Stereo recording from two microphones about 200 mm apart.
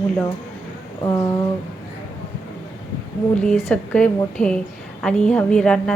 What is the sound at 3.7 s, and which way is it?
A woman's voice, 5° left (ahead or behind).